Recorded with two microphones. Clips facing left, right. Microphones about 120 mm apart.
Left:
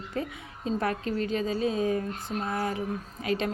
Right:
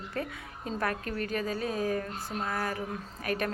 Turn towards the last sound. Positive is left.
turn(degrees=20)  # may be behind; listen again after turning